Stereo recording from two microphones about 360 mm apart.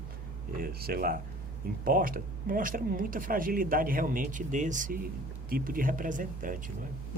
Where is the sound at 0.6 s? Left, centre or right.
Right.